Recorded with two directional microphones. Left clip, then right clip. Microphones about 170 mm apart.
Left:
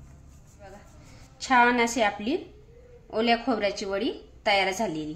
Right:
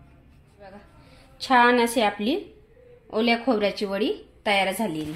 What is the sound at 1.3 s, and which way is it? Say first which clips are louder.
Speech: right 3 dB; 30° right (ahead or behind).